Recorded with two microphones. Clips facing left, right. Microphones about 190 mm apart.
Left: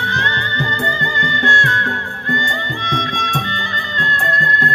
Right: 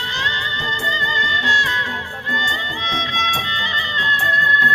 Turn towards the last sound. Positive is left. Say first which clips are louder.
# left 3 dB
turn(degrees=45)  # may be behind; listen again after turning